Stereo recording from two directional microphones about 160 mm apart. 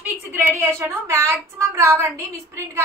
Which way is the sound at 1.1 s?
20° right (ahead or behind).